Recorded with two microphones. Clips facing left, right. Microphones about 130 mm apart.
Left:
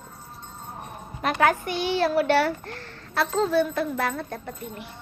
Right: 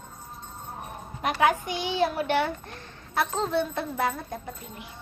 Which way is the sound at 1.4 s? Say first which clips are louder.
Left 2 dB; 15° right (ahead or behind).